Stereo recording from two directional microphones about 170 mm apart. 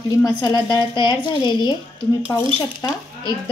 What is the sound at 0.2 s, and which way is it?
Speech, 20° left (ahead or behind).